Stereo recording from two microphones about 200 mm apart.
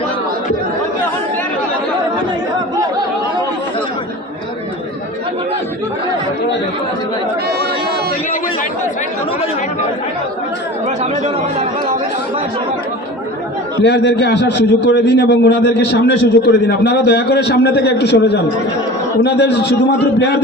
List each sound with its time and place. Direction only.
11.0 s speech: 35° right (ahead or behind)
13.8 s a man's voice: 60° left (ahead or behind)